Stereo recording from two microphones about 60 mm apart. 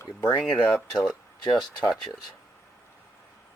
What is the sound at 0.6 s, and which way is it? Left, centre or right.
Speech, centre.